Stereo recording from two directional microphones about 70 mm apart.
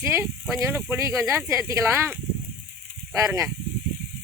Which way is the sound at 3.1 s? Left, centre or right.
Right.